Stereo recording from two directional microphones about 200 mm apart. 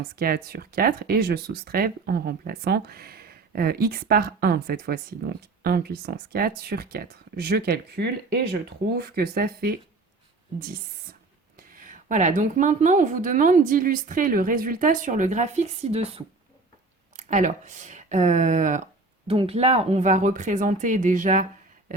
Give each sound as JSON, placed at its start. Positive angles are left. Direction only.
{"t": 0.0, "sound": "speech", "side_deg": -50}
{"t": 11.5, "sound": "speech", "side_deg": -40}
{"t": 19.3, "sound": "speech", "side_deg": -30}